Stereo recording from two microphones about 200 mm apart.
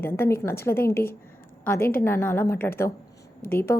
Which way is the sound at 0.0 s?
10° left (ahead or behind).